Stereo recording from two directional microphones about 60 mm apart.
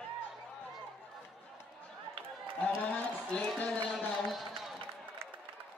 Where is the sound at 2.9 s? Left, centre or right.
Centre.